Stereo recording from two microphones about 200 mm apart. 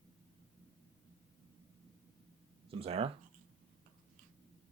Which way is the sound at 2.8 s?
30° right (ahead or behind).